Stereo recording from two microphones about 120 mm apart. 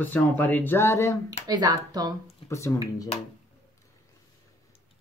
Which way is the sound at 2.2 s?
25° left (ahead or behind).